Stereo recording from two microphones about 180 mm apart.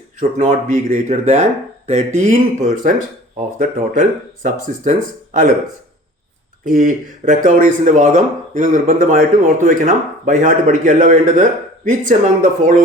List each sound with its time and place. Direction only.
0.2 s speech: 45° right (ahead or behind)
6.7 s speech: 45° right (ahead or behind)